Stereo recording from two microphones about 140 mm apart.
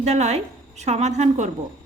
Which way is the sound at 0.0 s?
50° right (ahead or behind).